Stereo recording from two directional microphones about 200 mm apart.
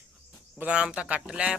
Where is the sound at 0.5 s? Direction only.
5° right (ahead or behind).